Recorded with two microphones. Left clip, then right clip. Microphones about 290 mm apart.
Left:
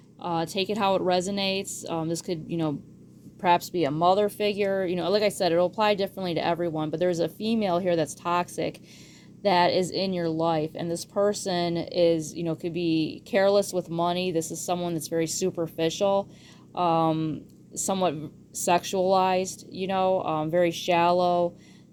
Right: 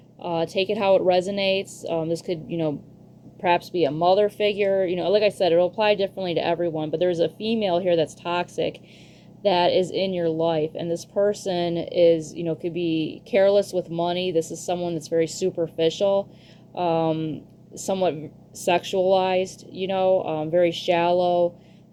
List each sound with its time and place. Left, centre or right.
0.2 s speech: left
7.6 s speech: left
9.4 s speech: left
10.2 s speech: left
10.6 s speech: left
11.1 s speech: left
11.7 s speech: left
15.4 s speech: left
15.8 s speech: left
18.8 s speech: left
19.1 s speech: left
19.4 s speech: left
20.2 s speech: left
20.7 s speech: left